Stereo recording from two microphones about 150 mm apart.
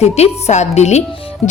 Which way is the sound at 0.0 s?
45° left (ahead or behind).